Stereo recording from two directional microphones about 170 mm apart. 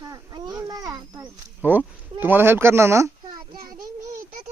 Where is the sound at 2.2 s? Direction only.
10° right (ahead or behind).